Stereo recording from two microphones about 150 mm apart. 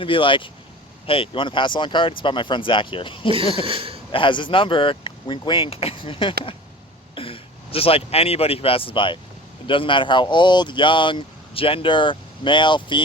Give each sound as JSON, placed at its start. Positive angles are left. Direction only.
{"t": 0.0, "sound": "speech", "side_deg": 35}
{"t": 3.3, "sound": "a sound", "side_deg": -35}
{"t": 4.1, "sound": "speech", "side_deg": 35}